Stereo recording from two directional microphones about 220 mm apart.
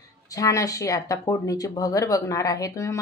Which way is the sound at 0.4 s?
15° left (ahead or behind).